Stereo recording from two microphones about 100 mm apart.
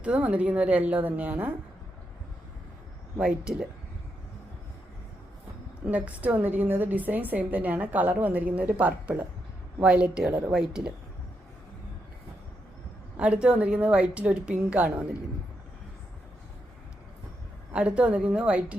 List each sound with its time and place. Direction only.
0.0 s a woman's voice: 10° right (ahead or behind)
3.2 s a woman's voice: 10° right (ahead or behind)
5.9 s a woman's voice: 15° right (ahead or behind)
13.1 s a woman's voice: 10° right (ahead or behind)
17.7 s a woman's voice: 10° right (ahead or behind)